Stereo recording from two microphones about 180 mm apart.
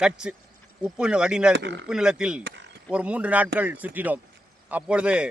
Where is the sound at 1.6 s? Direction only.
80° right.